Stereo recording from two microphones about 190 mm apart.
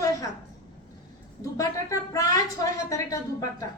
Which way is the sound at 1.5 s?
20° left (ahead or behind).